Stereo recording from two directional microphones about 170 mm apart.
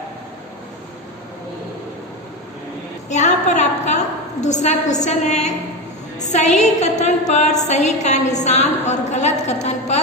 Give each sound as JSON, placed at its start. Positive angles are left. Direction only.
{"t": 3.1, "sound": "a woman's voice", "side_deg": 45}
{"t": 6.1, "sound": "a sound", "side_deg": 45}
{"t": 7.7, "sound": "a woman's voice", "side_deg": 40}